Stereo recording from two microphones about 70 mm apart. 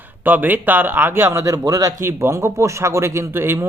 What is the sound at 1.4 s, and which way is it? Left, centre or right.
Speech, right.